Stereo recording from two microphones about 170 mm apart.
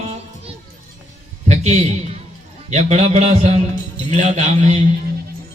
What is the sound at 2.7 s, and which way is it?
A man's voice, 40° right (ahead or behind).